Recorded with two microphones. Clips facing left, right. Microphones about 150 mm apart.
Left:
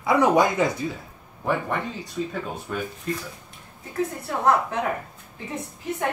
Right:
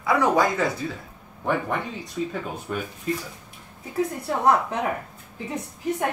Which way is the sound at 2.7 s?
5° right (ahead or behind).